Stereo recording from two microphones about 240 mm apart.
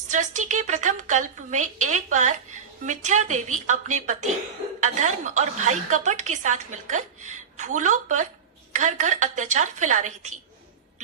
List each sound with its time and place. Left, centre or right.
0.1 s a woman's voice: right